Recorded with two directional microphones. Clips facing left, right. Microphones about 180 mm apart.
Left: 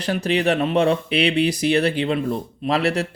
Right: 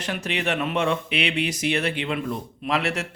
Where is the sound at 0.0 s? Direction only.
35° left (ahead or behind).